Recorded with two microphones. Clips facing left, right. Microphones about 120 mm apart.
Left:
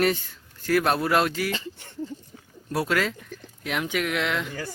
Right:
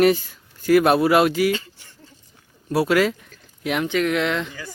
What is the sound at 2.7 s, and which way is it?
Speech, 5° right (ahead or behind).